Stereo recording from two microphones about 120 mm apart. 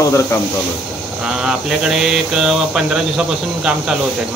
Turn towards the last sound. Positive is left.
turn(degrees=-5)  # may be behind; listen again after turning